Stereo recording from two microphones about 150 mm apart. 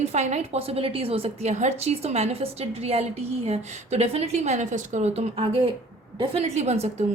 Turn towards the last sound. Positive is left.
turn(degrees=-45)  # may be behind; listen again after turning